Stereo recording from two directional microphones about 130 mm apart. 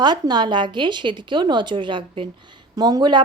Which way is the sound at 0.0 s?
35° right (ahead or behind).